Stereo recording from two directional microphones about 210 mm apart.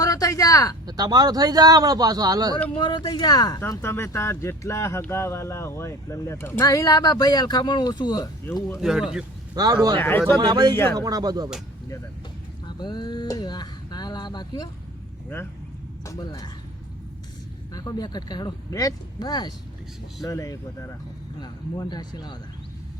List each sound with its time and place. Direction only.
0.0 s a sound: 15° left (ahead or behind)
0.9 s a man's voice: 20° right (ahead or behind)
2.7 s speech: 20° left (ahead or behind)
8.8 s speech: centre (ahead or behind)
9.6 s a man's voice: 15° right (ahead or behind)
10.0 s speech: 10° left (ahead or behind)
10.3 s a man's voice: 20° right (ahead or behind)
12.6 s a sound: 20° left (ahead or behind)
16.0 s speech: 15° left (ahead or behind)
17.7 s speech: 20° left (ahead or behind)